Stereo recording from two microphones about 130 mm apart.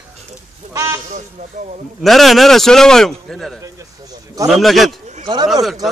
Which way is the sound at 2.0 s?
Centre (ahead or behind).